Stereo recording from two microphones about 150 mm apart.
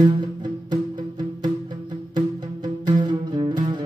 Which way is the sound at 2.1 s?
30° right (ahead or behind).